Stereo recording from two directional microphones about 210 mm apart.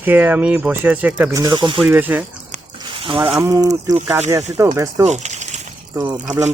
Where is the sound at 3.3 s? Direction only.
15° right (ahead or behind).